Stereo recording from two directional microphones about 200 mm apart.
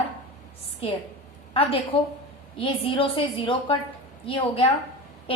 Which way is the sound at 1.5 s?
30° left (ahead or behind).